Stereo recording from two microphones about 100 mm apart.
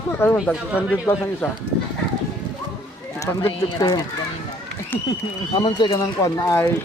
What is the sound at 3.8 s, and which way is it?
Speech, 45° left (ahead or behind).